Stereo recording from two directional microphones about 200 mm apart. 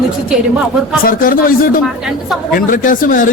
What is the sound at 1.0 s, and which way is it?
A man's voice, 45° left (ahead or behind).